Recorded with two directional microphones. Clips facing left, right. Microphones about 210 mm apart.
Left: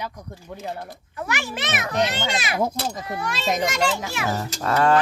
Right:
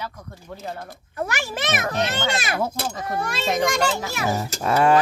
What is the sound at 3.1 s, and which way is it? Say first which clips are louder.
A child's voice: right 2 dB; 50° right (ahead or behind).